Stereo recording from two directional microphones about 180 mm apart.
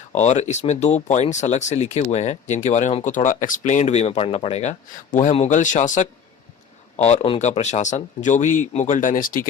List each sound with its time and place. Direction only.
0.2 s speech: 40° left (ahead or behind)